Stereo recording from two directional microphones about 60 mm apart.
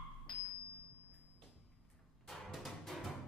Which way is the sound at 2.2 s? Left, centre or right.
Centre.